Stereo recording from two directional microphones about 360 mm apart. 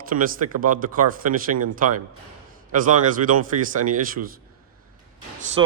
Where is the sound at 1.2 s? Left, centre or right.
Right.